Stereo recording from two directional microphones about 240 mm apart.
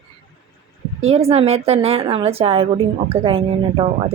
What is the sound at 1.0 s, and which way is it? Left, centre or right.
Speech, right.